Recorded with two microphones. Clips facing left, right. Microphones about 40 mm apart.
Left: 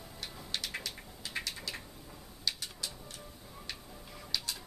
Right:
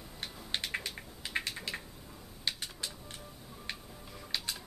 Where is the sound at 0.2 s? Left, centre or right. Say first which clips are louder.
Right 2 dB; right.